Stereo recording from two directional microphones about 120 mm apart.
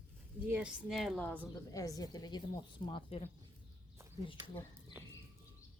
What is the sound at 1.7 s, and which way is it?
Speech, 30° left (ahead or behind).